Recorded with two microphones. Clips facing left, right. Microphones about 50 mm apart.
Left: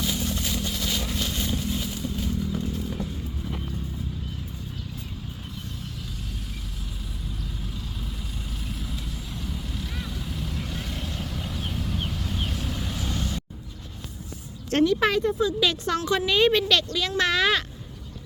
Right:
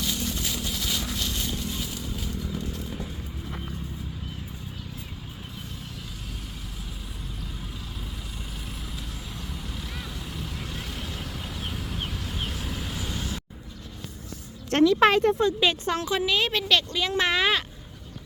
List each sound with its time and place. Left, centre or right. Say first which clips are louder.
0.0 s vehicle: left 2 dB; centre
9.4 s vehicle: left 4 dB; centre
14.9 s speech: right 3 dB; right
15.6 s speech: even; right
16.2 s speech: left 5 dB; centre
16.9 s speech: even; centre